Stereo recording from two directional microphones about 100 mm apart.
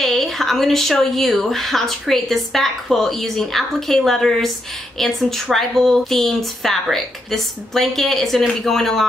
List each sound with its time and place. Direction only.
0.0 s speech: centre (ahead or behind)